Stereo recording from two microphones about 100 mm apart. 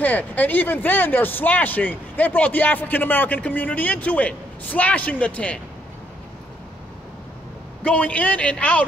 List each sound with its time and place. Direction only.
0.0 s speech: 15° left (ahead or behind)
7.8 s speech: 15° left (ahead or behind)